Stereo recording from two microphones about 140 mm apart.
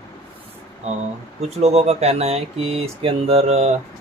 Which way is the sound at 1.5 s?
45° right (ahead or behind).